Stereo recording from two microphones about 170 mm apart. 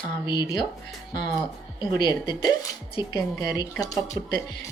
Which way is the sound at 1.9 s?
25° left (ahead or behind).